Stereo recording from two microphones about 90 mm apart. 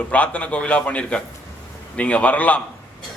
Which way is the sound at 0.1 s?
15° left (ahead or behind).